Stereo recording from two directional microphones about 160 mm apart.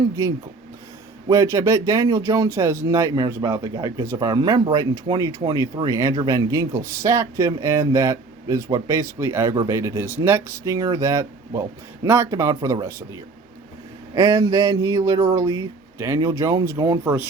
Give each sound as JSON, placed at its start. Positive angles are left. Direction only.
{"t": 0.0, "sound": "speech", "side_deg": -20}
{"t": 14.2, "sound": "speech", "side_deg": -20}